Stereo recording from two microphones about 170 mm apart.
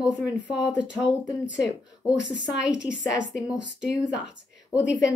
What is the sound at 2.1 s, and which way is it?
Speech, 90° left.